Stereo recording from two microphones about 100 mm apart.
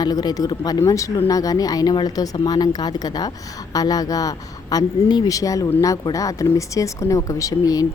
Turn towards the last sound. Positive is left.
turn(degrees=35)  # may be behind; listen again after turning